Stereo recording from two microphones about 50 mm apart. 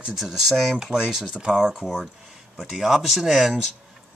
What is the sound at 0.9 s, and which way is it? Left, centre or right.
Speech, centre.